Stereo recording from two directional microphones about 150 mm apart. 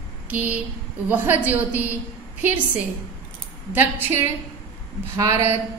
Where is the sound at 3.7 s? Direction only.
15° right (ahead or behind).